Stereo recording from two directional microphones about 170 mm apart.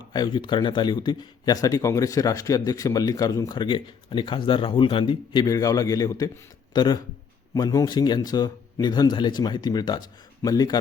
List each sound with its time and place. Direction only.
0.1 s speech: 25° left (ahead or behind)